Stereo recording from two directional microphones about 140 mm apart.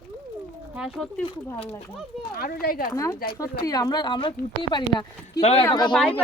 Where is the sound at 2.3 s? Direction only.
90° left.